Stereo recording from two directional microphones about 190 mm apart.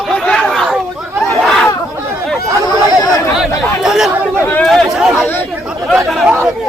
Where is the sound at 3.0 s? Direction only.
20° left (ahead or behind).